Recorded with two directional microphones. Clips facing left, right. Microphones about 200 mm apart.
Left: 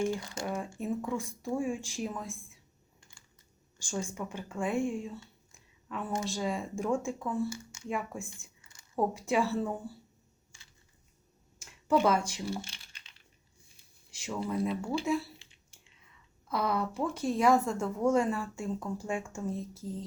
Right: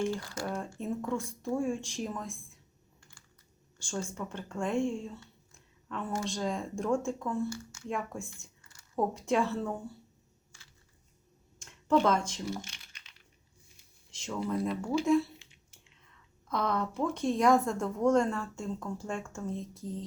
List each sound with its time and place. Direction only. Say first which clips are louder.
0.0 s speech: left 1 dB; 20° left (ahead or behind)
0.4 s a woman's voice: left 1 dB; 5° left (ahead or behind)
3.8 s a woman's voice: left 1 dB; 10° left (ahead or behind)
5.5 s a sound: right 1 dB; 5° left (ahead or behind)
6.2 s speech: even; 5° left (ahead or behind)
11.6 s speech: even; 5° left (ahead or behind)
12.6 s typing: even; 30° left (ahead or behind)
14.1 s a woman's voice: right 1 dB; 10° left (ahead or behind)